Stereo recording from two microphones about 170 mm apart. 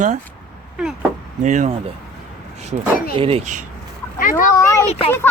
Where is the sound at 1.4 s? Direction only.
45° right (ahead or behind).